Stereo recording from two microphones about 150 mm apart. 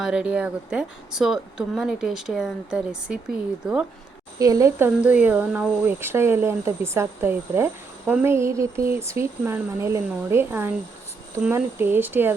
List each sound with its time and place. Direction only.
0.0 s speech: 5° right (ahead or behind)
4.4 s speech: 25° right (ahead or behind)